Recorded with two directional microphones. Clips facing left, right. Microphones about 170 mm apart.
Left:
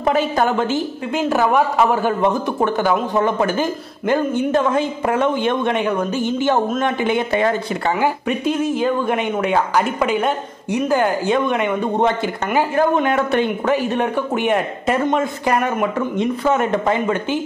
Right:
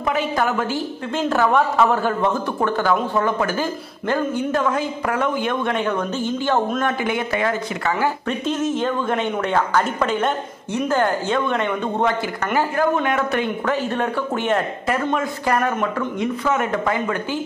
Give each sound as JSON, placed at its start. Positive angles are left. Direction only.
{"t": 0.0, "sound": "a woman's voice", "side_deg": 35}
{"t": 8.0, "sound": "speech", "side_deg": 10}
{"t": 12.7, "sound": "a woman's voice", "side_deg": 30}
{"t": 13.7, "sound": "a woman's voice", "side_deg": 15}
{"t": 16.2, "sound": "a woman's voice", "side_deg": 30}